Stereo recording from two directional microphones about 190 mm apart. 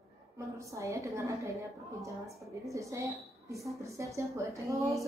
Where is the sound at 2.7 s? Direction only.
15° right (ahead or behind).